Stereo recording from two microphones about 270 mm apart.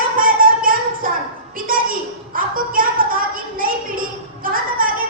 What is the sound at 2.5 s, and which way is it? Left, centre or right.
Music, right.